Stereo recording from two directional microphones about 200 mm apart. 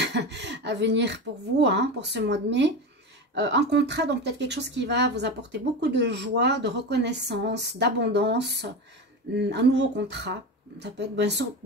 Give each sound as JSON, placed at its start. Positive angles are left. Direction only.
{"t": 0.0, "sound": "a woman's voice", "side_deg": -60}